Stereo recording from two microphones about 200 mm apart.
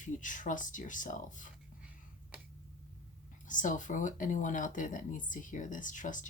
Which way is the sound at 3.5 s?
40° left (ahead or behind).